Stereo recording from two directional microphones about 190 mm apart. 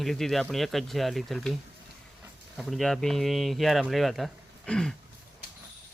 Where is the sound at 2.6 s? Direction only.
Centre (ahead or behind).